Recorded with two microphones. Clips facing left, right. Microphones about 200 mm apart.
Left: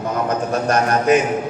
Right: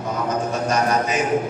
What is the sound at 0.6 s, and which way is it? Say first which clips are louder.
Speech: left 5 dB; 60° left (ahead or behind).